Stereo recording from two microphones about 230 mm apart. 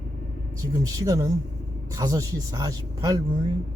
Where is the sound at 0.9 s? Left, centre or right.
Centre.